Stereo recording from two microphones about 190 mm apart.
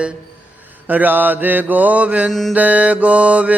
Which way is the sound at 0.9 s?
10° right (ahead or behind).